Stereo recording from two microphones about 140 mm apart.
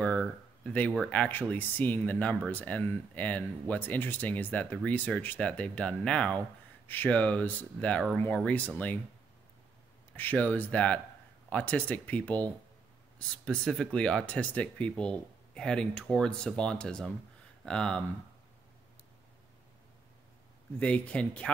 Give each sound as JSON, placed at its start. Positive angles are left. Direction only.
{"t": 0.0, "sound": "speech", "side_deg": 5}
{"t": 10.1, "sound": "speech", "side_deg": 10}
{"t": 20.8, "sound": "speech", "side_deg": 10}